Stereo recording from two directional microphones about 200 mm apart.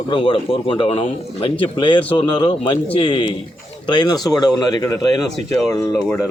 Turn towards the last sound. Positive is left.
turn(degrees=10)  # may be behind; listen again after turning